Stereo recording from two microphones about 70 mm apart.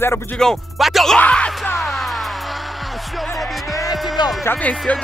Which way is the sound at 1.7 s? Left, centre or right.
Centre.